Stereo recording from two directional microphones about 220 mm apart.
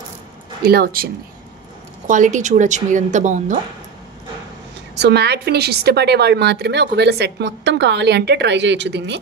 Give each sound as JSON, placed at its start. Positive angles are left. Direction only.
{"t": 0.7, "sound": "a woman's voice", "side_deg": -45}
{"t": 4.9, "sound": "a woman's voice", "side_deg": -50}